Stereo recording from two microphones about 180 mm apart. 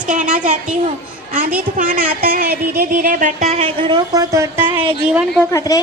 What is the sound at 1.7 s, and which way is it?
Speech, 50° right (ahead or behind).